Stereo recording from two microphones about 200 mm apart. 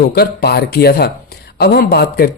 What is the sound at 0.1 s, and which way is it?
Speech, 50° left (ahead or behind).